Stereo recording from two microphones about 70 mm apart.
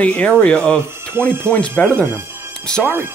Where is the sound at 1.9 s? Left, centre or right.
Right.